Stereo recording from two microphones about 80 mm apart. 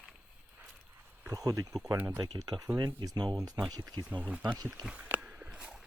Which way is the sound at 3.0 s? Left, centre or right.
Right.